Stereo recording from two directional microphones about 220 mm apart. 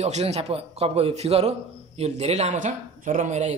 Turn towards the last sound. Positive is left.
turn(degrees=-30)  # may be behind; listen again after turning